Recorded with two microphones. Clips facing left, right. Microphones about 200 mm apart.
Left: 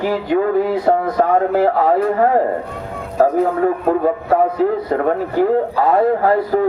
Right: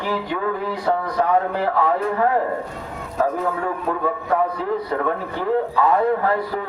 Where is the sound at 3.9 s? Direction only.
45° left (ahead or behind).